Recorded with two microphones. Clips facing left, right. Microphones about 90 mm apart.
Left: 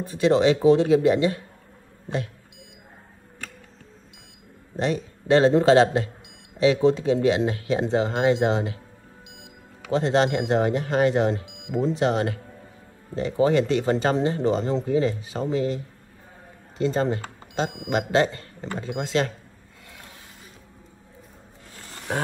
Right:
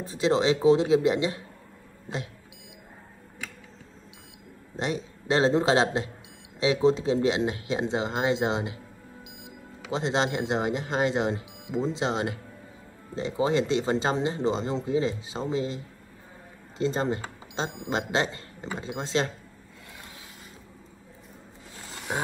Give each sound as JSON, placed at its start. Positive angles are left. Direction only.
{"t": 0.1, "sound": "speech", "side_deg": -25}
{"t": 4.7, "sound": "speech", "side_deg": -20}
{"t": 9.9, "sound": "speech", "side_deg": -20}